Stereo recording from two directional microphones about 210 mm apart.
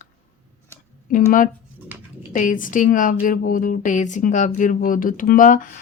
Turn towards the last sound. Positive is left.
turn(degrees=40)  # may be behind; listen again after turning